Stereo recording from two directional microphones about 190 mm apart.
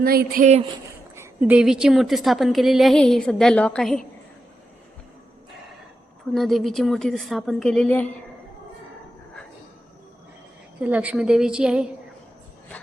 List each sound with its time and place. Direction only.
0.0 s speech: 50° right (ahead or behind)
1.1 s a woman's voice: 10° right (ahead or behind)
6.3 s a woman's voice: centre (ahead or behind)
10.8 s a woman's voice: 10° right (ahead or behind)